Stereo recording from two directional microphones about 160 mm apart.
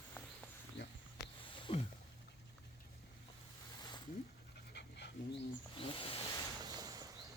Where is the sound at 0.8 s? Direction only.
90° left.